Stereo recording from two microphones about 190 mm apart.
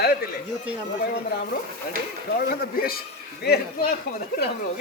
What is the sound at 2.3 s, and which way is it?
A man's voice, 55° left (ahead or behind).